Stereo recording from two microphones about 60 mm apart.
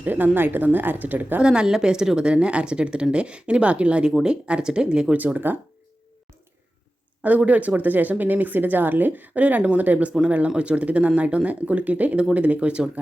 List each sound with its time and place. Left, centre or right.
0.0 s speech: right
1.4 s speech: centre
5.1 s speech: right
7.2 s speech: right